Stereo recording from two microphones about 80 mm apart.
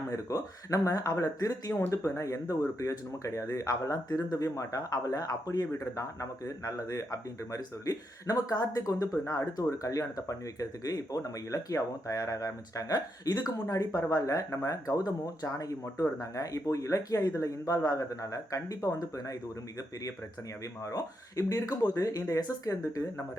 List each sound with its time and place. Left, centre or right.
0.1 s speech: left
20.8 s speech: left